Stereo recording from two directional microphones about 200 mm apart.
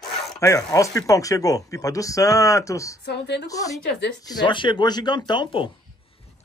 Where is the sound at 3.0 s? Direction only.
60° left (ahead or behind).